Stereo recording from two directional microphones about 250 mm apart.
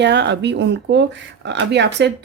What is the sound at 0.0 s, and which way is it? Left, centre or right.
Speech, right.